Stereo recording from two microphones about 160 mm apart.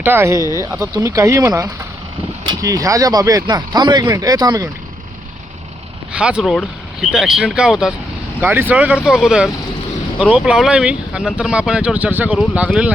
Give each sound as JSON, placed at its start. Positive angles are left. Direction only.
{"t": 0.0, "sound": "speech", "side_deg": -15}
{"t": 6.1, "sound": "speech", "side_deg": -5}
{"t": 8.4, "sound": "speech", "side_deg": -15}